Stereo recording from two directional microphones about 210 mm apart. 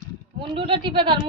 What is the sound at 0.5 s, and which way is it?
Speech, 25° right (ahead or behind).